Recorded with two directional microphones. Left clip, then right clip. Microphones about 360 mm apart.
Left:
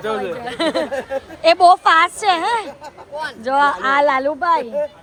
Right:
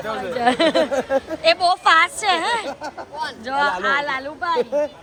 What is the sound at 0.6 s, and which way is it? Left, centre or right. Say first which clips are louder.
A woman's voice: right 2 dB; centre.